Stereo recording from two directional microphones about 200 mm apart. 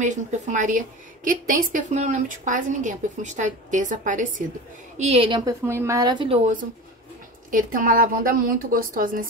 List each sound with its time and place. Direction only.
0.0 s a woman's voice: 40° right (ahead or behind)
5.7 s speech: 15° right (ahead or behind); by 6.6 s 35° right (ahead or behind)
7.5 s a woman's voice: 45° right (ahead or behind)